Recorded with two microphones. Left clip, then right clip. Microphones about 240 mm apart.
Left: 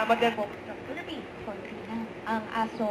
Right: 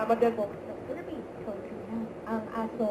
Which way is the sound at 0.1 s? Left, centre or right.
Centre.